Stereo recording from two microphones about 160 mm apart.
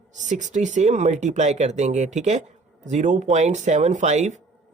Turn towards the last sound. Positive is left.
turn(degrees=-45)  # may be behind; listen again after turning